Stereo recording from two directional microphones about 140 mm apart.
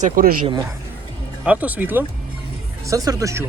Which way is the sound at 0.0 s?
85° right.